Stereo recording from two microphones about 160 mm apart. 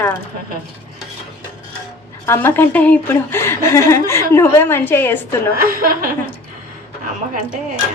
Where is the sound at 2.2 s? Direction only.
15° left (ahead or behind).